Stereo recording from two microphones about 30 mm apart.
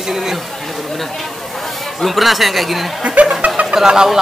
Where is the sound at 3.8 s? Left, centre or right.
Right.